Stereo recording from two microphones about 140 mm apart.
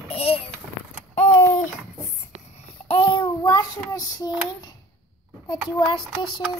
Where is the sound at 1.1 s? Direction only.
55° left (ahead or behind).